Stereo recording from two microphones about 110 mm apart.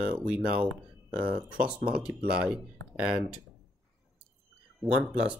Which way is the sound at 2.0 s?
10° right (ahead or behind).